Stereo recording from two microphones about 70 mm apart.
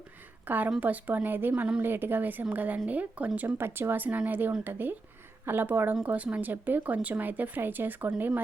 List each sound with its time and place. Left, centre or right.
0.4 s a woman's voice: right